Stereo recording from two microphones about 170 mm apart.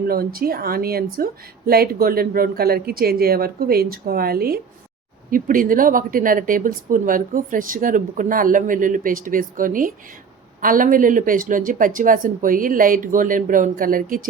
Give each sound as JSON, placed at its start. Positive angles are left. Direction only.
{"t": 0.1, "sound": "a woman's voice", "side_deg": -60}